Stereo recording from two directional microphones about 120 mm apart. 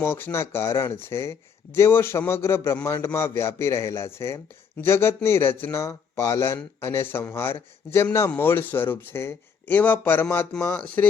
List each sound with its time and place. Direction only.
0.0 s speech: 20° left (ahead or behind)